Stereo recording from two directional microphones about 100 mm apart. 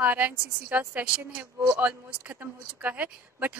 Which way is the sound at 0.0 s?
15° right (ahead or behind).